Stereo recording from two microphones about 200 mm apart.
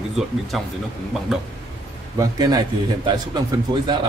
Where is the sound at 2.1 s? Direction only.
20° right (ahead or behind).